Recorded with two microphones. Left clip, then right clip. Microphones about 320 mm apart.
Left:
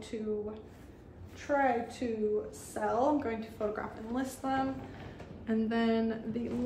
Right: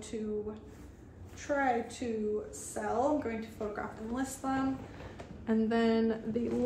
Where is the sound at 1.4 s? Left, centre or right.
Centre.